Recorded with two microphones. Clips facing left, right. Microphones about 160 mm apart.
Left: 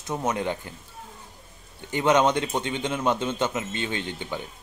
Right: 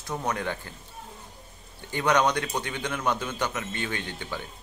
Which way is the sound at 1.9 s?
20° left (ahead or behind).